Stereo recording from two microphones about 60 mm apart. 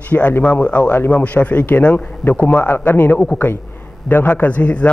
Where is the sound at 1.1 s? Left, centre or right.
Left.